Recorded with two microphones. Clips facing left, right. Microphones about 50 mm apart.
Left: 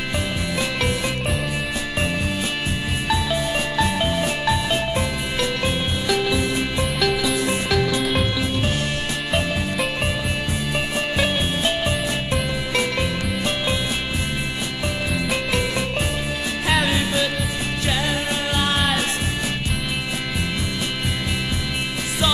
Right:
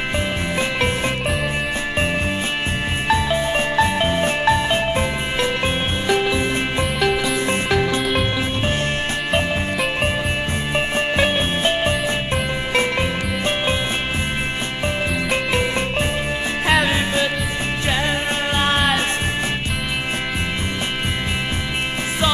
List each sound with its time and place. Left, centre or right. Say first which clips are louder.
0.6 s music: right 3 dB; right
3.1 s music: right 4 dB; right
8.0 s music: right 1 dB; centre
11.0 s music: right 3 dB; right